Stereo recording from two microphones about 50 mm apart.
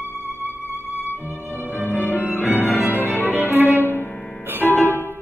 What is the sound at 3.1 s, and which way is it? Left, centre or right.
Violin, right.